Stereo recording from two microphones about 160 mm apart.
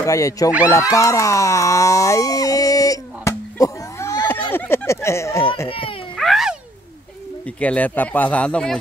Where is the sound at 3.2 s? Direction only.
20° left (ahead or behind).